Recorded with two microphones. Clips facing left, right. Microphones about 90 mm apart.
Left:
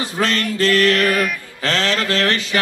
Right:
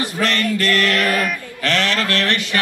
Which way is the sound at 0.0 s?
30° left (ahead or behind).